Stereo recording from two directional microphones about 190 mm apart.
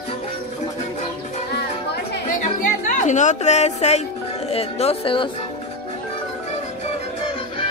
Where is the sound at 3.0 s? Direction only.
40° left (ahead or behind).